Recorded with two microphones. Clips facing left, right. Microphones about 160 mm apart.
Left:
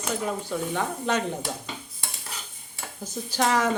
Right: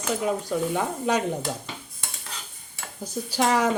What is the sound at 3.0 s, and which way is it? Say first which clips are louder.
Speech: right 2 dB; 10° right (ahead or behind).